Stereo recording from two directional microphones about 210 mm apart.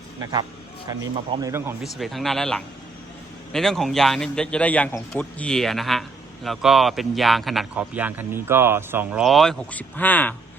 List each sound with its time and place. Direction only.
0.9 s speech: 20° right (ahead or behind)
1.8 s a man's voice: centre (ahead or behind)